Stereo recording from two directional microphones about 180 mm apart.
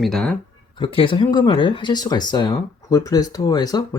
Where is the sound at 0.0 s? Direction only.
5° left (ahead or behind).